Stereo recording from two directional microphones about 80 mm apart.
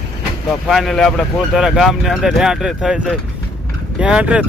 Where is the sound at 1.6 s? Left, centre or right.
Centre.